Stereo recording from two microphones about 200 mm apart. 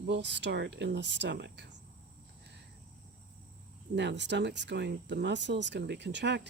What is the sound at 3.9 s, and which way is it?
Speech, 60° right (ahead or behind).